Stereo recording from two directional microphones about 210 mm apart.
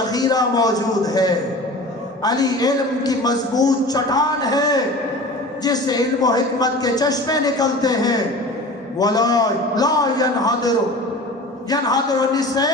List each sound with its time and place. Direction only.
0.1 s a man's voice: 20° left (ahead or behind)
11.7 s a man's voice: 20° left (ahead or behind)